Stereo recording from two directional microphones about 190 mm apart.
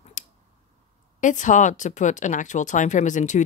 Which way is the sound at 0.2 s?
40° left (ahead or behind).